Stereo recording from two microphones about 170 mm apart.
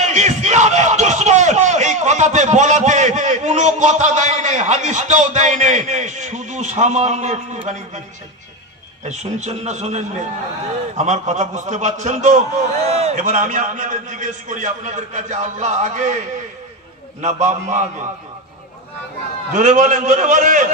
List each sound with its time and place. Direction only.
0.0 s crowd: 45° right (ahead or behind)
9.0 s a man's voice: 40° right (ahead or behind)
17.2 s a man's voice: 45° right (ahead or behind)
19.5 s a man's voice: 45° right (ahead or behind)